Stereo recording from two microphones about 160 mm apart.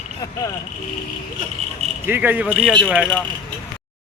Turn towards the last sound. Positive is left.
turn(degrees=0)  # may be behind; listen again after turning